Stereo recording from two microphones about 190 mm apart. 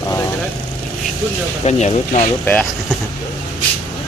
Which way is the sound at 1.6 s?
35° left (ahead or behind).